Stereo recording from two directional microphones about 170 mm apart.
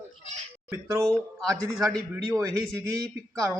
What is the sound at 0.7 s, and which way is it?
Speech, 15° right (ahead or behind).